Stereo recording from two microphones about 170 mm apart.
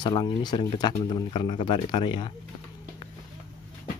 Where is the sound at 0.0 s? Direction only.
25° left (ahead or behind).